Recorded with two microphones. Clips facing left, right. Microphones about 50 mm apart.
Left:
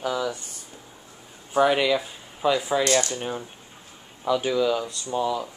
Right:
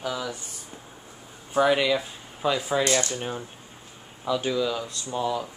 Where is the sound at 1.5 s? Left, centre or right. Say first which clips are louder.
Left 1 dB; centre.